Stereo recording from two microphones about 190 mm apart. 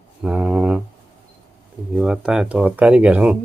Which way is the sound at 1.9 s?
5° right (ahead or behind).